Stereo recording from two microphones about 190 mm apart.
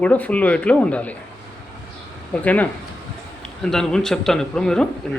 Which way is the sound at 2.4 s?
10° left (ahead or behind).